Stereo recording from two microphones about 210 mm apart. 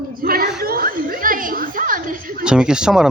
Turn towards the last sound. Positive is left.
turn(degrees=-5)  # may be behind; listen again after turning